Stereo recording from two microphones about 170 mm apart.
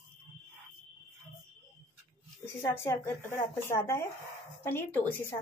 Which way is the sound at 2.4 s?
15° left (ahead or behind).